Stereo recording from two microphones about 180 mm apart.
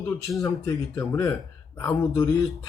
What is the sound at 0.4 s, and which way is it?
Speech, 20° left (ahead or behind).